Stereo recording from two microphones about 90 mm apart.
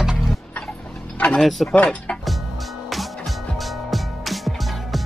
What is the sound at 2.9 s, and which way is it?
Music, centre (ahead or behind).